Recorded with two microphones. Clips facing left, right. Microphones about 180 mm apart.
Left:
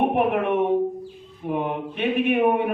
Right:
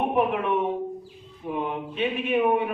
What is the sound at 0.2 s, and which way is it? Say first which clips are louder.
A man's voice: left 3 dB; 60° left (ahead or behind).